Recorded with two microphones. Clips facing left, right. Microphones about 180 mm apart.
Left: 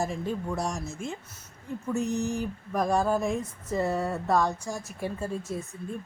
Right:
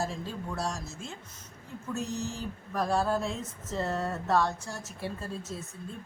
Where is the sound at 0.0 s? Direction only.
15° left (ahead or behind).